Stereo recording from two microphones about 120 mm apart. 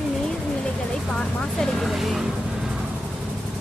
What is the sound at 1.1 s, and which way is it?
Speech, 5° left (ahead or behind).